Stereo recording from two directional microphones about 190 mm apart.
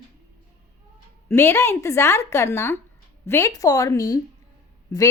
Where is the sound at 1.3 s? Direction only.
15° left (ahead or behind).